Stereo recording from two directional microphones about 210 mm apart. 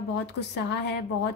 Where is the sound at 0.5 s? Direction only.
55° left (ahead or behind).